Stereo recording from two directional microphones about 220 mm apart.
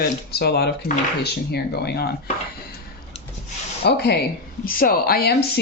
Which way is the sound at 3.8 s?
45° left (ahead or behind).